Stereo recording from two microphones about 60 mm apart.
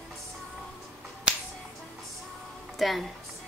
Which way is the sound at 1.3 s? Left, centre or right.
Centre.